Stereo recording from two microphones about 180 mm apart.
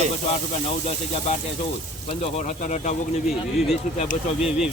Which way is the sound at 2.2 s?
40° left (ahead or behind).